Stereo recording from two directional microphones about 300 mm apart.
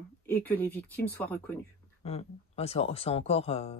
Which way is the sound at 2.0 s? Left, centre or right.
Left.